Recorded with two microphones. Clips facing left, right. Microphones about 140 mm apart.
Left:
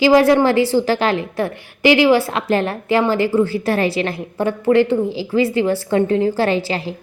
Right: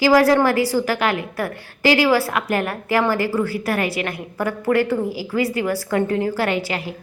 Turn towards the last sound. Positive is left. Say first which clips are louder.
# left 4 dB
turn(degrees=30)  # may be behind; listen again after turning